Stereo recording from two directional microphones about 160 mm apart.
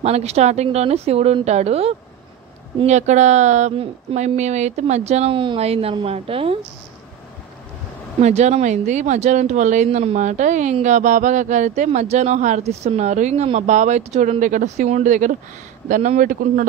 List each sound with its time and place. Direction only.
0.0 s speech: 40° right (ahead or behind)
8.2 s speech: 45° right (ahead or behind)